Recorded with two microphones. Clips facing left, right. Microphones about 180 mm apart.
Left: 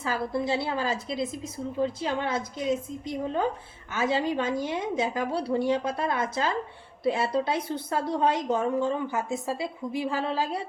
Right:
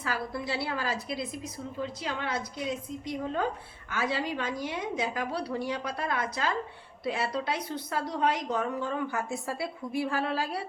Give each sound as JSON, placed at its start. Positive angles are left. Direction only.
{"t": 0.0, "sound": "a woman's voice", "side_deg": 25}